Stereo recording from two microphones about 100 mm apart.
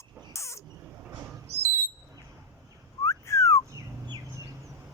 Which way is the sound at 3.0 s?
30° left (ahead or behind).